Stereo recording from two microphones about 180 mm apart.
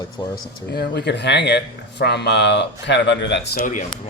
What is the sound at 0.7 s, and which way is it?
Speech, 65° left (ahead or behind).